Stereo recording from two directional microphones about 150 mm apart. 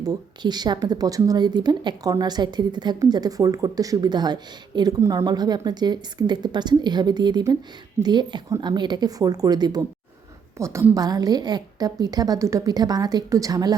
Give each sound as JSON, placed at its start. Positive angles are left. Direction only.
{"t": 0.0, "sound": "speech", "side_deg": -25}